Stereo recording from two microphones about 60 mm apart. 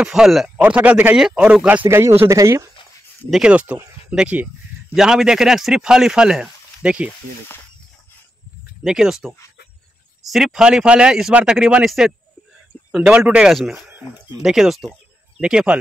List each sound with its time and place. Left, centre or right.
0.0 s speech: centre
0.6 s speech: right
1.9 s speech: right
3.4 s speech: right
4.9 s speech: centre
8.8 s a man's voice: centre
12.9 s speech: centre
13.5 s a man's voice: centre
15.4 s speech: centre